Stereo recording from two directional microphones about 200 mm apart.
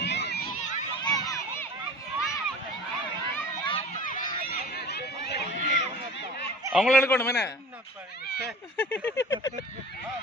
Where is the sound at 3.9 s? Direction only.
40° left (ahead or behind).